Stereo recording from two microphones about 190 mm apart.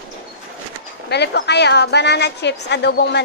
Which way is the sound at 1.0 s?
60° left (ahead or behind).